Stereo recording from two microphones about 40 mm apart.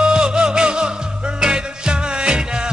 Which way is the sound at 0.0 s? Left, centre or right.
Right.